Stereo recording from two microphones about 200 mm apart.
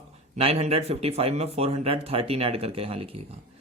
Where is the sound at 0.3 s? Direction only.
30° right (ahead or behind).